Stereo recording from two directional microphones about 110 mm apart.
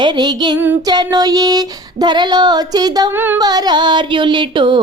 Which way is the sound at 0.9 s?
35° right (ahead or behind).